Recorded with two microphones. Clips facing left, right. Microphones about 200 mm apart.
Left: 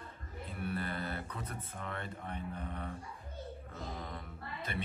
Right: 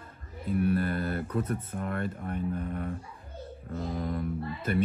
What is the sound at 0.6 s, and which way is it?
Speech, 50° right (ahead or behind).